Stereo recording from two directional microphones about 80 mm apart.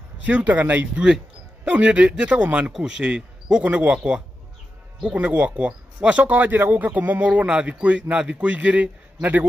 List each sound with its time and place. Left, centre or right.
0.3 s speech: centre